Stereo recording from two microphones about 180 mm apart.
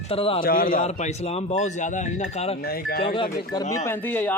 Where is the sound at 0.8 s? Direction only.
40° left (ahead or behind).